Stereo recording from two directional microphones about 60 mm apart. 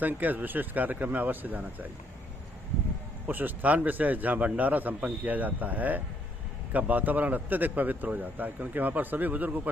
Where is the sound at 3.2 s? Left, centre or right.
Right.